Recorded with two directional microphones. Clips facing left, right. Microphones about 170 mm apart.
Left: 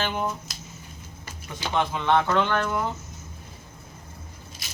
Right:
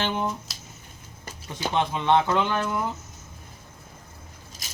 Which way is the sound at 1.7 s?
20° right (ahead or behind).